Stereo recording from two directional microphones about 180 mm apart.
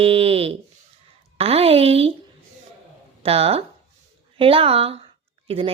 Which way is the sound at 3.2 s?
35° right (ahead or behind).